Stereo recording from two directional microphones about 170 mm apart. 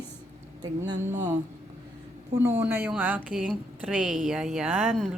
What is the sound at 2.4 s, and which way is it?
A woman's voice, 15° right (ahead or behind).